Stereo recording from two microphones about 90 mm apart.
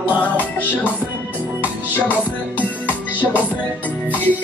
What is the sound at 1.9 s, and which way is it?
Music, 20° left (ahead or behind).